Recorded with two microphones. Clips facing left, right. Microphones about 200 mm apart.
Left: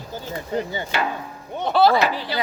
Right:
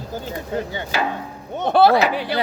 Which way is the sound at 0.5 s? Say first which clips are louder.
Left 1 dB; 10° left (ahead or behind).